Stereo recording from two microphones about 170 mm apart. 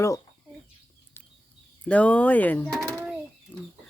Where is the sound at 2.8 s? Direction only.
15° right (ahead or behind).